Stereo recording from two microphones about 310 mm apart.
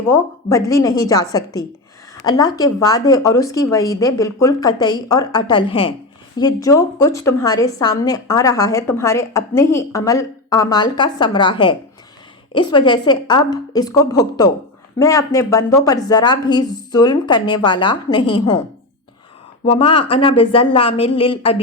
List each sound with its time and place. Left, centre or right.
0.1 s a woman's voice: centre
19.6 s a woman's voice: centre